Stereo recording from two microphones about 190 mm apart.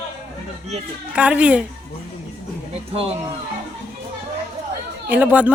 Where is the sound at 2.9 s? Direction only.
30° right (ahead or behind).